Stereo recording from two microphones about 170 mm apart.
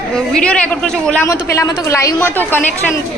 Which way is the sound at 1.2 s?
15° left (ahead or behind).